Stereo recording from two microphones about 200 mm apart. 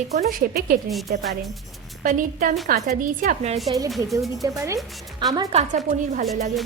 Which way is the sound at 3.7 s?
15° right (ahead or behind).